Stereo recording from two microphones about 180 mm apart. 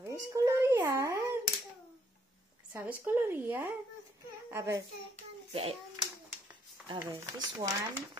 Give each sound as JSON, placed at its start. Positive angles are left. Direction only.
{"t": 0.0, "sound": "a sound", "side_deg": -15}
{"t": 2.7, "sound": "speech", "side_deg": -10}
{"t": 5.5, "sound": "a child's voice", "side_deg": -35}
{"t": 6.9, "sound": "speech", "side_deg": -25}